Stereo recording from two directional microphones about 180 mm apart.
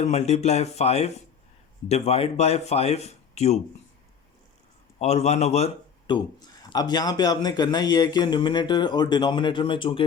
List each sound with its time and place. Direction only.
0.0 s speech: 35° left (ahead or behind)
4.9 s speech: 35° left (ahead or behind)
6.4 s speech: 20° left (ahead or behind)